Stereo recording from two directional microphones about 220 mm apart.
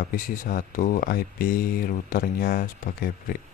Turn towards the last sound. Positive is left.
turn(degrees=40)  # may be behind; listen again after turning